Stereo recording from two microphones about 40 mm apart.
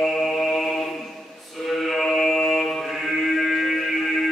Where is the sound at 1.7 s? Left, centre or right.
Centre.